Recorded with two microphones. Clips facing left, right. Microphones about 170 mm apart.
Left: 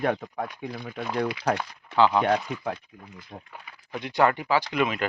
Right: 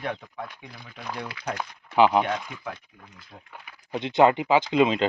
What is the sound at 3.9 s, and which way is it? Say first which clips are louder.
Speech: right 4 dB; 25° right (ahead or behind).